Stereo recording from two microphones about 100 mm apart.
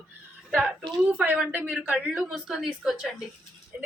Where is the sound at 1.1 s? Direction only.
15° right (ahead or behind).